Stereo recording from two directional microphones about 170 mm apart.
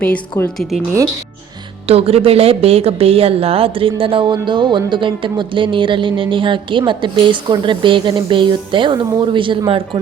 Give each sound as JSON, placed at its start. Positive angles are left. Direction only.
{"t": 0.0, "sound": "a woman's voice", "side_deg": 5}
{"t": 1.9, "sound": "a woman's voice", "side_deg": -35}